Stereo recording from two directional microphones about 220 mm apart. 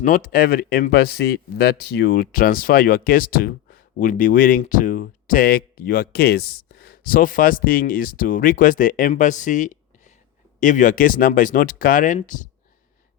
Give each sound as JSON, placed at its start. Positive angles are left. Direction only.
{"t": 0.0, "sound": "speech", "side_deg": 40}